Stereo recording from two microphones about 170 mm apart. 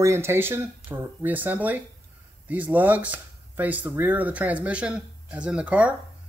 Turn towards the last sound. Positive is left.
turn(degrees=-5)  # may be behind; listen again after turning